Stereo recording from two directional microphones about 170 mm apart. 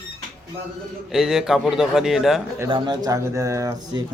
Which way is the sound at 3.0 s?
20° right (ahead or behind).